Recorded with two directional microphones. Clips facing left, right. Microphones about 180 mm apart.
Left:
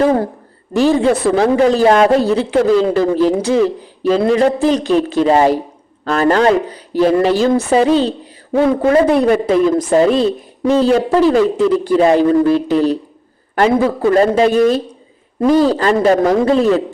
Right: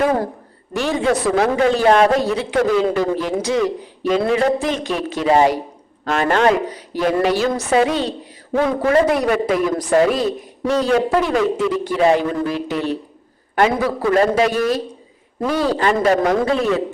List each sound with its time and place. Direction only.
0.0 s a woman's voice: 30° left (ahead or behind)